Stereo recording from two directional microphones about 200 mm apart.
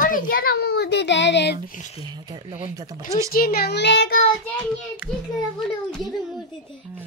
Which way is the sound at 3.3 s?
50° left (ahead or behind).